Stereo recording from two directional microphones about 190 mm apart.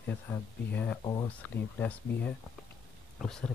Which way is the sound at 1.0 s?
20° left (ahead or behind).